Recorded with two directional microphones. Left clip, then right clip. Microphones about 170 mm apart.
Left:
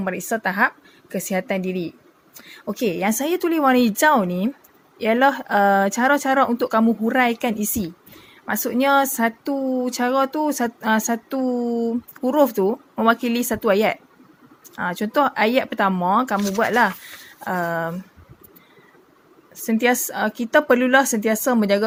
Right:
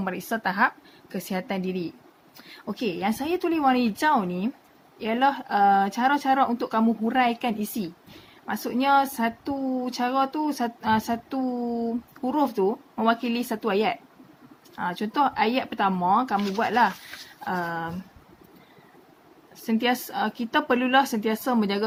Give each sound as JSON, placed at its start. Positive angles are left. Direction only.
{"t": 0.0, "sound": "a woman's voice", "side_deg": 25}
{"t": 19.6, "sound": "speech", "side_deg": 35}